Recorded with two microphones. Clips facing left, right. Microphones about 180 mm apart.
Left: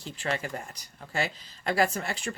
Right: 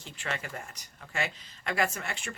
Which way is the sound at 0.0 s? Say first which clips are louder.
Left 5 dB; 35° left (ahead or behind).